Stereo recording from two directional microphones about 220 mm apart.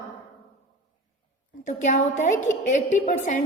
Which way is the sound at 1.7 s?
35° left (ahead or behind).